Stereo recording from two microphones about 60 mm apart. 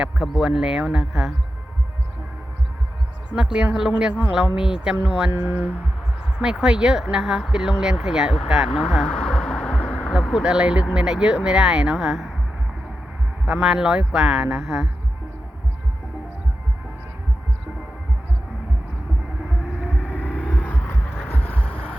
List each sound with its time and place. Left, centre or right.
0.0 s speech: centre
3.3 s speech: centre
5.4 s speech: right
6.4 s speech: centre
9.0 s a sound: centre
10.3 s speech: centre
13.5 s speech: centre
19.8 s vehicle: right
20.2 s a sound: left